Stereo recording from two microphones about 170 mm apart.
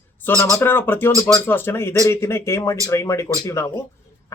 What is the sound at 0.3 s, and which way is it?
Speech, 15° left (ahead or behind).